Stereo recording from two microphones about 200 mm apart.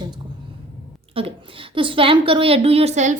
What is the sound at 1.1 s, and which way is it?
A woman's voice, 25° right (ahead or behind).